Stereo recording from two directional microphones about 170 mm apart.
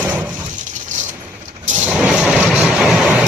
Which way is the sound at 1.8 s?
5° right (ahead or behind).